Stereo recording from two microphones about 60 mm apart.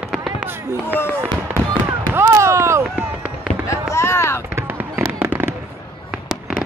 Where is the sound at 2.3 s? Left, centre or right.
Right.